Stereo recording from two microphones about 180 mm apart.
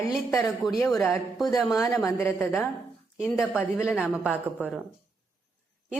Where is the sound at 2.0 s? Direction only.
15° left (ahead or behind).